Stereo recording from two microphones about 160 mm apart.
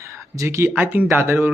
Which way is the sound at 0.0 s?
20° right (ahead or behind).